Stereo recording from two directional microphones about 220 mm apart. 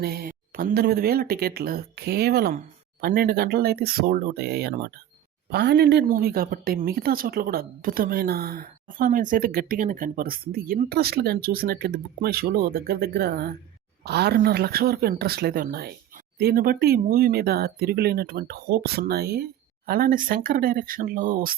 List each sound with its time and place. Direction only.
0.0 s speech: 45° right (ahead or behind)